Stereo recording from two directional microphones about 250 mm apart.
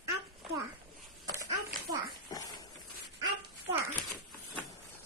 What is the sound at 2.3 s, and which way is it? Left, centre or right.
Dog, centre.